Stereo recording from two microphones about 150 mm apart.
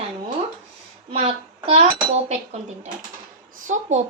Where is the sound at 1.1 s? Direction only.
40° right (ahead or behind).